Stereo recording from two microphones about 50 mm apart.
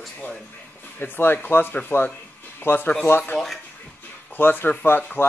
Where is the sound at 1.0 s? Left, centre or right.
Left.